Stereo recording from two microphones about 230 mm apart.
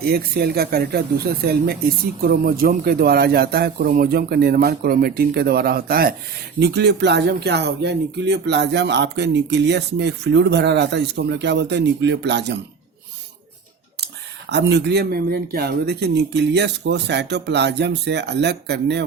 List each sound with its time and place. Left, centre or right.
0.0 s speech: right
14.5 s speech: right